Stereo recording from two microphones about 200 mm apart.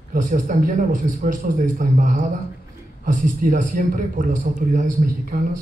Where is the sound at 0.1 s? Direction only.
40° right (ahead or behind).